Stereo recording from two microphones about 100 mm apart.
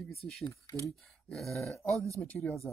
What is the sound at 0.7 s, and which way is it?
Speech, 30° left (ahead or behind).